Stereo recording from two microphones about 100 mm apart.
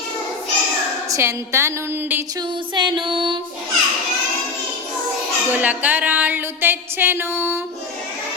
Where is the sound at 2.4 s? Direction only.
50° right (ahead or behind).